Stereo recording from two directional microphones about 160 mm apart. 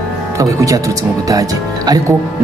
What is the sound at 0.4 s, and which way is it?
Speech, 20° right (ahead or behind).